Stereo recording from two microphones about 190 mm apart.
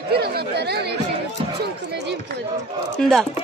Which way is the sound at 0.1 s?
55° right (ahead or behind).